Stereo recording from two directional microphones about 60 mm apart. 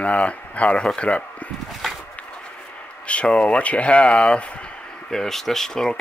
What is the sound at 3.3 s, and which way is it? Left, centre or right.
Speech, centre.